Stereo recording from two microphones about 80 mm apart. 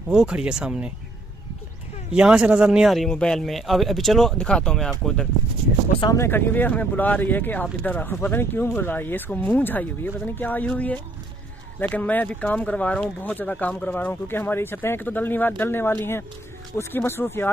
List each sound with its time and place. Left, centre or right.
0.1 s speech: centre
2.1 s speech: centre
2.9 s speech: centre
6.1 s speech: left